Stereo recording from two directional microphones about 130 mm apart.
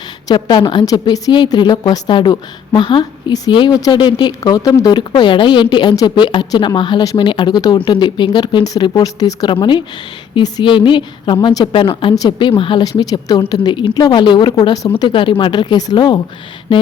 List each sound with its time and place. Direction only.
0.3 s a woman's voice: 35° left (ahead or behind)